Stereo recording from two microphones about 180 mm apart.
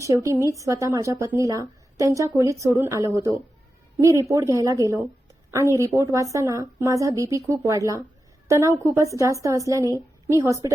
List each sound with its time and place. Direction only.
0.0 s speech: 15° right (ahead or behind)